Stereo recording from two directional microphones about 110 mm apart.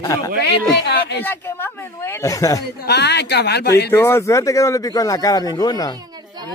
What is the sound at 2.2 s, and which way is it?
Speech, 30° left (ahead or behind).